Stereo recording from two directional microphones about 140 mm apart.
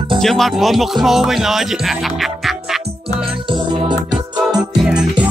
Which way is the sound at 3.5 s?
35° right (ahead or behind).